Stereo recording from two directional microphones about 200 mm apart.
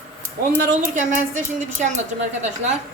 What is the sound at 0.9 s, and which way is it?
A woman's voice, 40° right (ahead or behind).